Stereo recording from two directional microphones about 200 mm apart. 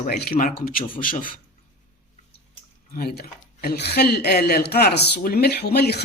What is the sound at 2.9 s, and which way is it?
Speech, 50° left (ahead or behind).